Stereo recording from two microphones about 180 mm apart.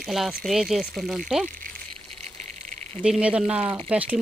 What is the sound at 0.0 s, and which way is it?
Speech, centre (ahead or behind).